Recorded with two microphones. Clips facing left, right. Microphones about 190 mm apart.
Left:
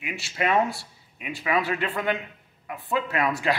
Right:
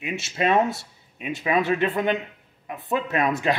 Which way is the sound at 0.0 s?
20° right (ahead or behind).